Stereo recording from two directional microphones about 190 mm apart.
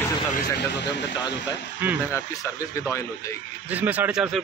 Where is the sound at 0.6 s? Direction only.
65° left (ahead or behind).